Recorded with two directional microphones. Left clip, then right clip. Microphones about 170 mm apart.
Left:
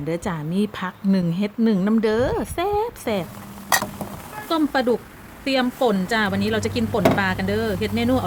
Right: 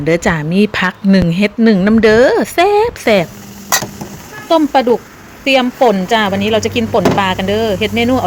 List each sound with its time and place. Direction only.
0.0 s speech: 15° right (ahead or behind)
4.4 s speech: centre (ahead or behind)